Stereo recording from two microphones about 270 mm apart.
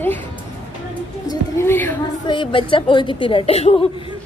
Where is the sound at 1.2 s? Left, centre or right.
Centre.